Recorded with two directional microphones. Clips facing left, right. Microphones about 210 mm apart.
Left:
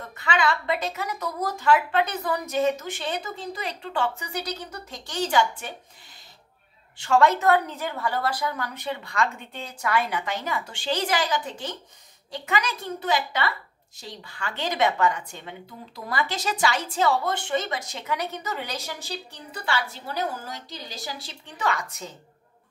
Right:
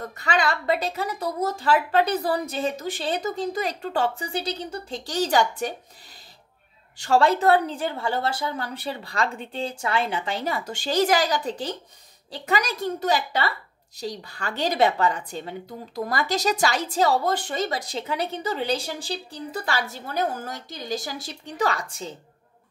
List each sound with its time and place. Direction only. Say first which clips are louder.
0.0 s a woman's voice: right 1 dB; 40° right (ahead or behind)
7.0 s a woman's voice: right 1 dB; 35° right (ahead or behind)